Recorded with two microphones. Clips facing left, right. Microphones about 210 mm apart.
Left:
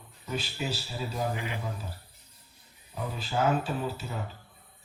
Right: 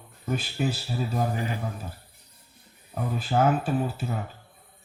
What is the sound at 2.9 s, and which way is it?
Speech, 50° right (ahead or behind).